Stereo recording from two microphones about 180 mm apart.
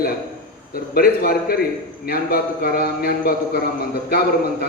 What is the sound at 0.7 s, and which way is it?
A man's voice, 55° left (ahead or behind).